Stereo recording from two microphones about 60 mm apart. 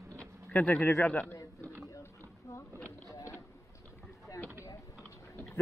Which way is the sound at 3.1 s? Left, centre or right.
Left.